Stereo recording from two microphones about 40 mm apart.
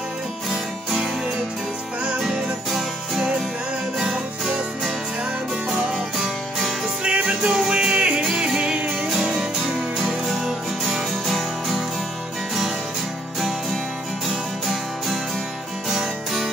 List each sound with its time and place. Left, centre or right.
2.2 s music: centre
5.7 s music: centre
7.1 s music: right
10.3 s music: centre